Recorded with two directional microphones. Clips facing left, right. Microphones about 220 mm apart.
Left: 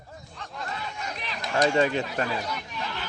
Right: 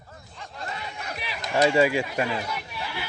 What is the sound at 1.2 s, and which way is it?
Chatter, 10° right (ahead or behind).